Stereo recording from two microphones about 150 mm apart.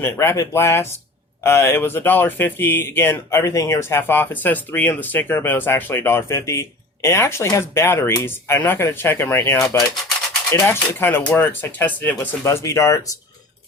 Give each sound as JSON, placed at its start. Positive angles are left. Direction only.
{"t": 0.0, "sound": "speech", "side_deg": 20}